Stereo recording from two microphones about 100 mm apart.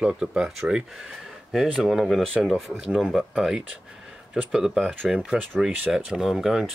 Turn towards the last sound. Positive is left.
turn(degrees=-5)  # may be behind; listen again after turning